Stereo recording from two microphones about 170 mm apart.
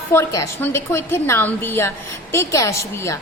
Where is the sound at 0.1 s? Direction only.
15° left (ahead or behind).